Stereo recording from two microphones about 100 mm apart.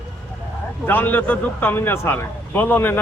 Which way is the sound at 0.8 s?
20° left (ahead or behind).